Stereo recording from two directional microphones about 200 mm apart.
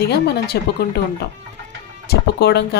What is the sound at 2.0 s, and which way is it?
Speech, 55° left (ahead or behind).